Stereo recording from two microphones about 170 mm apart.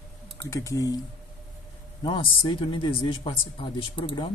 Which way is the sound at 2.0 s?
30° left (ahead or behind).